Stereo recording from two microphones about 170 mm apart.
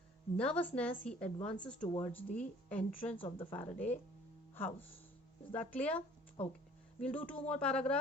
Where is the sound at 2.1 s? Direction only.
10° left (ahead or behind).